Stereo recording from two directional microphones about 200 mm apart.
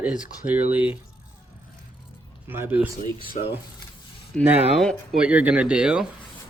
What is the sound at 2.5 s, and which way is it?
Speech, 10° right (ahead or behind).